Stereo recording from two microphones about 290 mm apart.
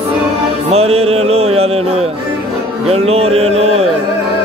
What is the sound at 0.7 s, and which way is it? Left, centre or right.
Music, right.